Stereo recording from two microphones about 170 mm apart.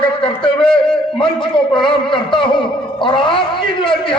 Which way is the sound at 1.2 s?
30° left (ahead or behind).